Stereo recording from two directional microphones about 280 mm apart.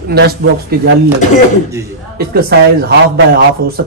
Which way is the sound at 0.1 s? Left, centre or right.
Right.